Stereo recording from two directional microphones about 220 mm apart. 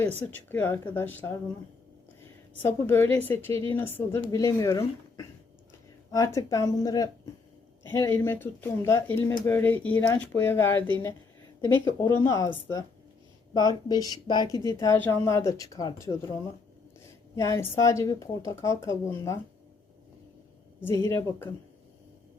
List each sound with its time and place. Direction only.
0.3 s speech: 10° left (ahead or behind)
2.6 s speech: 10° left (ahead or behind)
17.3 s speech: 15° left (ahead or behind)
20.8 s speech: 10° left (ahead or behind)